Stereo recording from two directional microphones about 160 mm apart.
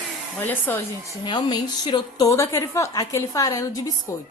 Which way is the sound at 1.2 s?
30° left (ahead or behind).